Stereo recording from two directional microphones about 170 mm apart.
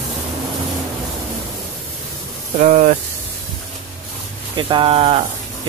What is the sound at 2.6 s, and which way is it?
Speech, 45° right (ahead or behind).